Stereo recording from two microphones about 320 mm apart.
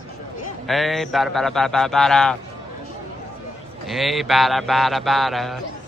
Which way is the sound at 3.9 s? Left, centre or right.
Centre.